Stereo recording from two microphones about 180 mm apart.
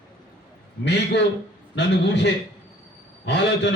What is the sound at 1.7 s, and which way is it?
A man's voice, 75° left (ahead or behind).